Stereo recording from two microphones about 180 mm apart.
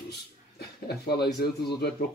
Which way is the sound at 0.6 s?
60° left (ahead or behind).